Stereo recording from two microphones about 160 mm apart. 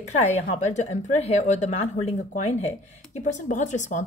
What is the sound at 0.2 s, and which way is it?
A woman's voice, 45° left (ahead or behind).